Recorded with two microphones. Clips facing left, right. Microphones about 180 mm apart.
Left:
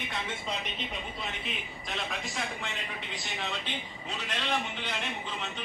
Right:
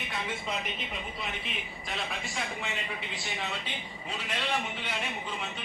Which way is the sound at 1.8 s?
Centre (ahead or behind).